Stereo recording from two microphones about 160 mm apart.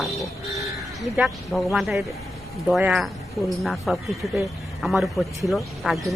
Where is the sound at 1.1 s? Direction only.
Centre (ahead or behind).